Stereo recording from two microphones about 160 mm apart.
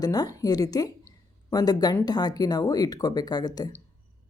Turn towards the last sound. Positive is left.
turn(degrees=25)  # may be behind; listen again after turning